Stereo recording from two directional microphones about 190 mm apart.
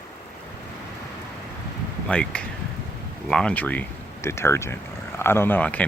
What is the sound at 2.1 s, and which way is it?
Speech, 5° left (ahead or behind).